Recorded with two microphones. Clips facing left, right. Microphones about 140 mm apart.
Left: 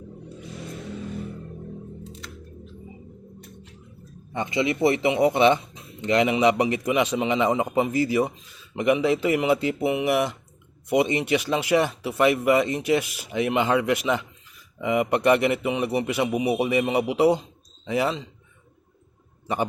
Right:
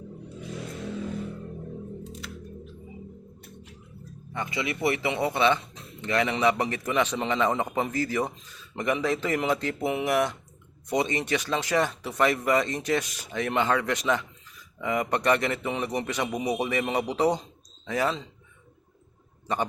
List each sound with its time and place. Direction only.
4.3 s a man's voice: 20° left (ahead or behind)